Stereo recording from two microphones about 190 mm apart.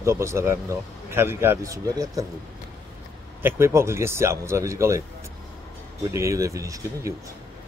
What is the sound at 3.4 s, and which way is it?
Speech, 10° right (ahead or behind).